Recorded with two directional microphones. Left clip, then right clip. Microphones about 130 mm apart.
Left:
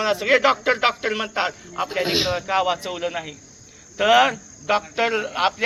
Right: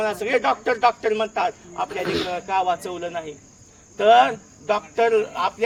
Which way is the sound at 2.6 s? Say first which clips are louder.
Right 3 dB; 45° right (ahead or behind).